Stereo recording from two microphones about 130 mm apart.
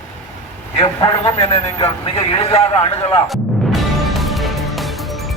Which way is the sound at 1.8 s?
50° left (ahead or behind).